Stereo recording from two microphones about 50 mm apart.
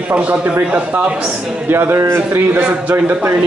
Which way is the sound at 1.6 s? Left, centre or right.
Right.